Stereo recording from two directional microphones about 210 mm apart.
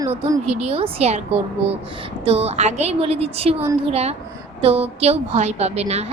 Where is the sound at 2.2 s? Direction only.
30° right (ahead or behind).